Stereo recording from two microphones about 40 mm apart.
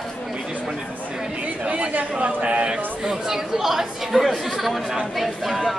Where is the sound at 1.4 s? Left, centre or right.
Right.